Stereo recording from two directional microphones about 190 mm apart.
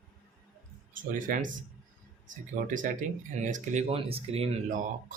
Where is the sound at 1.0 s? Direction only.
45° right (ahead or behind).